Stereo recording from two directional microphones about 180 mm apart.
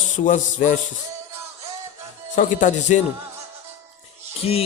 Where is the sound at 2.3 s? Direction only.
45° left (ahead or behind).